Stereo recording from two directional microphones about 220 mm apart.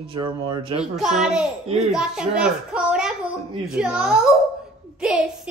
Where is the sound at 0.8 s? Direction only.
Centre (ahead or behind).